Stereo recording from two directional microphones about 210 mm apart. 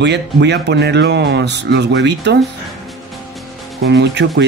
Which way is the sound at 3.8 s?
55° right (ahead or behind).